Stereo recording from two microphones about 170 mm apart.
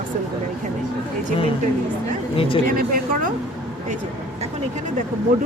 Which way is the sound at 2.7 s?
55° right (ahead or behind).